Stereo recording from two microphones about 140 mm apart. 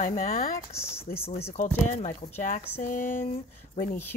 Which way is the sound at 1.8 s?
60° left (ahead or behind).